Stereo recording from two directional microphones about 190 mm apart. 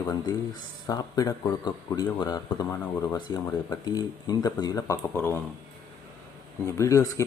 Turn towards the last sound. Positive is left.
turn(degrees=15)  # may be behind; listen again after turning